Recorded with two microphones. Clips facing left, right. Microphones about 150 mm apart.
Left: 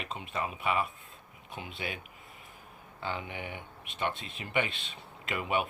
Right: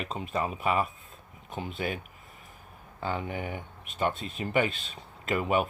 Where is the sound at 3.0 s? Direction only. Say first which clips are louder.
Right 5 dB; 40° right (ahead or behind).